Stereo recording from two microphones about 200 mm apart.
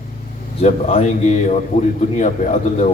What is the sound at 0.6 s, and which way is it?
Speech, 30° left (ahead or behind).